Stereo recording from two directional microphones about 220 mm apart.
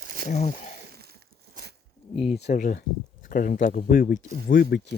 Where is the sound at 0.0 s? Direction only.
40° right (ahead or behind).